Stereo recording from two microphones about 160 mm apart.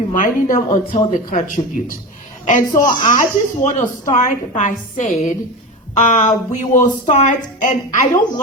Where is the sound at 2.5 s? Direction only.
50° left (ahead or behind).